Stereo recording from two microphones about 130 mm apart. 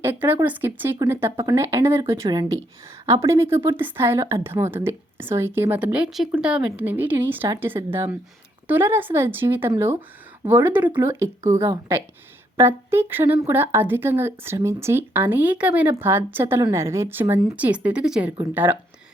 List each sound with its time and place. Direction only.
0.0 s speech: 15° right (ahead or behind)
2.3 s speech: 30° right (ahead or behind); by 18.8 s 15° right (ahead or behind)